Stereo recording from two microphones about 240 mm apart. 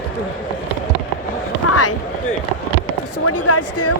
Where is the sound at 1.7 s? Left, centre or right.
Left.